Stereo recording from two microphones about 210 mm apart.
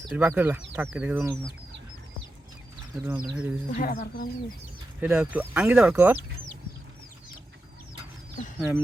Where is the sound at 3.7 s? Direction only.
45° left (ahead or behind).